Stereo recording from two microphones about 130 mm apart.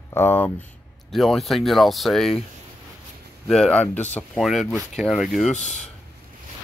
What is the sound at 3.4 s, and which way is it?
Speech, 5° left (ahead or behind).